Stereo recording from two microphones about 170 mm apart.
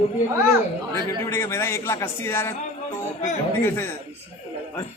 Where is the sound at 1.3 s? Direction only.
15° left (ahead or behind).